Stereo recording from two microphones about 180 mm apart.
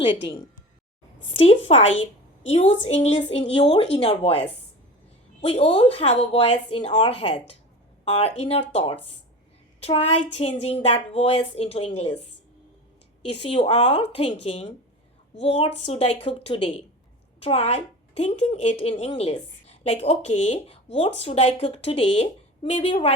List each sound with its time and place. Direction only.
1.4 s a woman's voice: 35° left (ahead or behind)
13.3 s a woman's voice: 30° left (ahead or behind)